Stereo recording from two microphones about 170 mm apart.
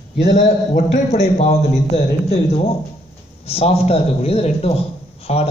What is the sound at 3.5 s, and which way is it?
A man's voice, 35° left (ahead or behind).